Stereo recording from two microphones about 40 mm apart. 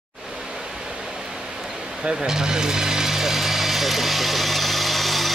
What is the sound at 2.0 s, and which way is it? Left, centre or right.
Power tool, centre.